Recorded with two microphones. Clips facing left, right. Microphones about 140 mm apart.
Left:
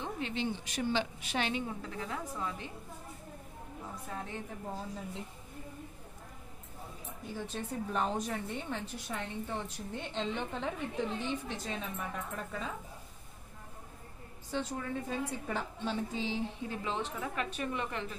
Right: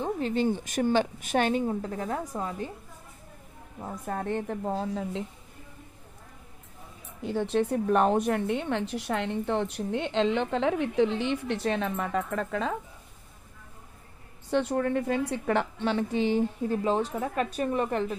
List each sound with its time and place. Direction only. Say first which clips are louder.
0.0 s a woman's voice: right 9 dB; 40° right (ahead or behind)
3.8 s a woman's voice: right 10 dB; 55° right (ahead or behind); by 5.2 s 90° right
7.2 s a woman's voice: right 13 dB; 70° right (ahead or behind); by 12.7 s 85° right
14.5 s a woman's voice: right 10 dB; 65° right (ahead or behind); by 18.1 s 40° right (ahead or behind)